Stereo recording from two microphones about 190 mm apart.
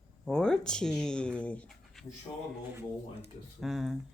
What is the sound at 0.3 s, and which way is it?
Speech, 5° left (ahead or behind).